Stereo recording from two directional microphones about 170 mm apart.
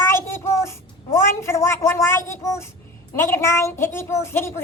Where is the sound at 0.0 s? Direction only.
15° left (ahead or behind).